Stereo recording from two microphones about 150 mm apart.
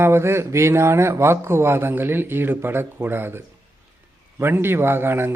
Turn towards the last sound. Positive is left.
turn(degrees=-15)  # may be behind; listen again after turning